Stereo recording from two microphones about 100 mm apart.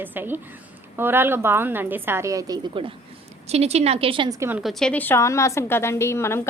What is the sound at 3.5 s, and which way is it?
Speech, 90° right.